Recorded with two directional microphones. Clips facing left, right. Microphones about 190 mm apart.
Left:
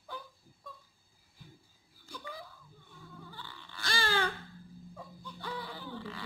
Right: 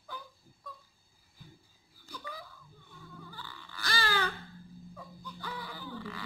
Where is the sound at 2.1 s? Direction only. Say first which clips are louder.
Even; 25° left (ahead or behind).